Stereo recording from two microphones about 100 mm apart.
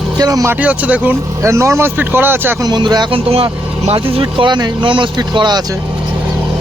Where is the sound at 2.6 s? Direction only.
45° right (ahead or behind).